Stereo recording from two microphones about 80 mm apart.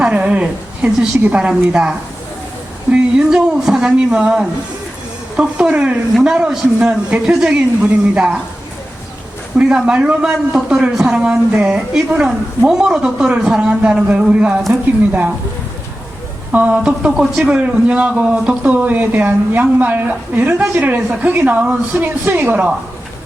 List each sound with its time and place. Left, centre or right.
0.0 s a sound: centre
1.3 s a man's voice: centre
9.6 s a man's voice: centre
16.5 s a man's voice: centre